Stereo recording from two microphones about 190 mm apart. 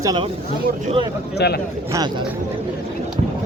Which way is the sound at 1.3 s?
60° left (ahead or behind).